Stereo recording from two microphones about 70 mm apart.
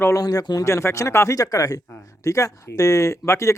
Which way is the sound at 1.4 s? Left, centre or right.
Left.